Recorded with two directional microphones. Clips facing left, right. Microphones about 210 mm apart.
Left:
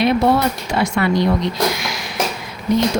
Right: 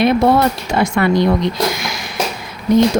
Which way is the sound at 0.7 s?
50° right (ahead or behind).